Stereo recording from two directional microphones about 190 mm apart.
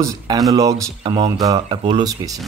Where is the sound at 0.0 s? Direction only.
15° right (ahead or behind).